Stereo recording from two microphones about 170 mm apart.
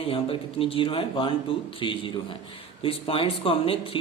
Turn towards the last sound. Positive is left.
turn(degrees=35)  # may be behind; listen again after turning